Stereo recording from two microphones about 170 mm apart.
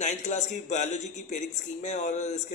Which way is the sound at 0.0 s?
45° left (ahead or behind).